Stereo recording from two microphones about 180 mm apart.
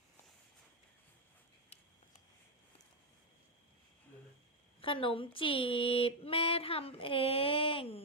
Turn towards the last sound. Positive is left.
turn(degrees=30)  # may be behind; listen again after turning